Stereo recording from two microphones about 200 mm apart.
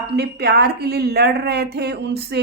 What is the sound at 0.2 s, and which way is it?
A woman's voice, 55° right (ahead or behind).